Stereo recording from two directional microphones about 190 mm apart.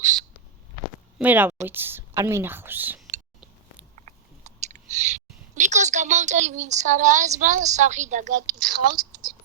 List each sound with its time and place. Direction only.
1.2 s speech: 10° right (ahead or behind)
3.9 s speech: 40° right (ahead or behind)